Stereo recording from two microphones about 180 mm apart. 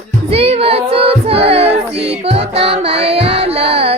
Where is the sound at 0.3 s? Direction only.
35° right (ahead or behind).